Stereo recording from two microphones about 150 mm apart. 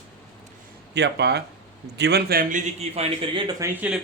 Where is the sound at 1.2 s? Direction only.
90° right; by 3.4 s 45° right (ahead or behind).